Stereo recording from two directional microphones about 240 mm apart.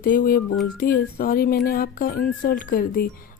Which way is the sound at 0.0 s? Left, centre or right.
Left.